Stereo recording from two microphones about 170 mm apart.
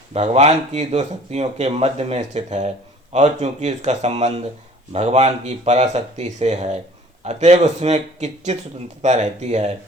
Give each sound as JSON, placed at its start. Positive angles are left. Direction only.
{"t": 0.1, "sound": "speech", "side_deg": -40}